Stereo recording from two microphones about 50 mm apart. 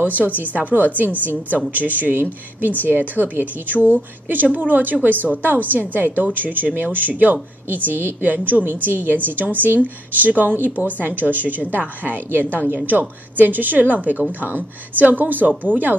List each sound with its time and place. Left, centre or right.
0.0 s a woman's voice: right
3.7 s speech: left
4.5 s a woman's voice: right